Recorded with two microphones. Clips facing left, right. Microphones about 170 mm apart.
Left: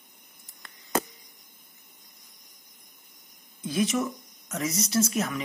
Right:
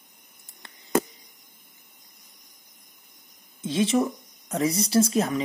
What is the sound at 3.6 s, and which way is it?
Speech, 25° right (ahead or behind).